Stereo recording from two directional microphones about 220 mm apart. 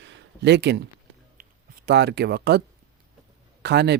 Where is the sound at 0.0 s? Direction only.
50° right (ahead or behind).